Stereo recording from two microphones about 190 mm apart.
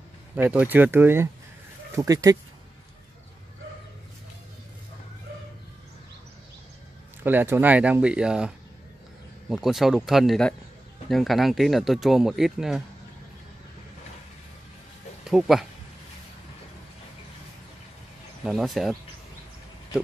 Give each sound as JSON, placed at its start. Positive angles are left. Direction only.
{"t": 0.4, "sound": "speech", "side_deg": -10}
{"t": 7.2, "sound": "speech", "side_deg": -10}
{"t": 15.2, "sound": "speech", "side_deg": 0}
{"t": 18.4, "sound": "speech", "side_deg": 0}